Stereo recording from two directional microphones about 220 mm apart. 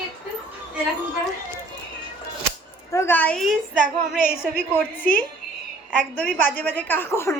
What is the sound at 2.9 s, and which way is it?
Speech, 10° left (ahead or behind).